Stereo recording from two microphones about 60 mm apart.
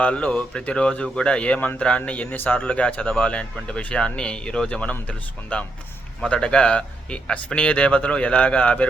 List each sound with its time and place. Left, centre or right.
0.0 s speech: left